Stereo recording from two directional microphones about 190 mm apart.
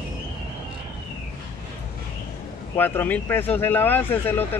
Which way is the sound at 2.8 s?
10° left (ahead or behind).